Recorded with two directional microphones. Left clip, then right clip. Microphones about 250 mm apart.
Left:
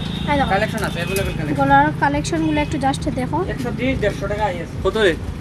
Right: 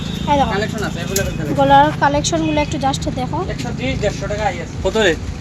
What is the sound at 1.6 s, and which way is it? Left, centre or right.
Speech, centre.